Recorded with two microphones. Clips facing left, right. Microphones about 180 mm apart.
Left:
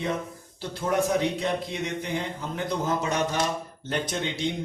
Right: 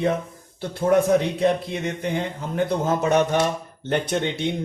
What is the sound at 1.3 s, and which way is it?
Speech, 60° right (ahead or behind).